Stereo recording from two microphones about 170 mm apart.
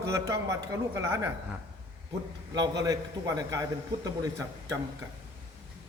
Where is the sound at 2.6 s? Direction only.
20° right (ahead or behind).